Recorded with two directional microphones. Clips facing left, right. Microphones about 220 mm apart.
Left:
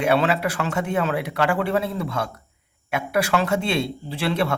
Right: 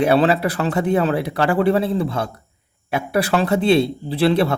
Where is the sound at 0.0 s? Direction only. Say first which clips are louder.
Right 4 dB; 35° right (ahead or behind).